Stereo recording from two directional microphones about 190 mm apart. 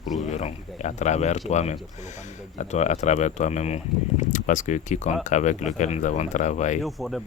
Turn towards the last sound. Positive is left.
turn(degrees=0)  # may be behind; listen again after turning